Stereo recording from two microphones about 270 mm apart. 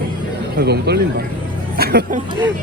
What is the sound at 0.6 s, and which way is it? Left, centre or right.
Speech, right.